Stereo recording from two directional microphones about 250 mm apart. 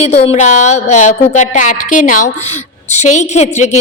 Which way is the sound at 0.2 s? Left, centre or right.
Left.